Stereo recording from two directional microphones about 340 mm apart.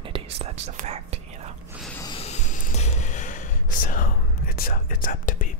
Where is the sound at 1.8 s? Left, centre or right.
Centre.